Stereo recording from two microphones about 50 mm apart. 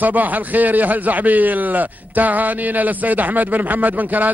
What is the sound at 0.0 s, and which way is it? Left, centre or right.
A man's voice, right.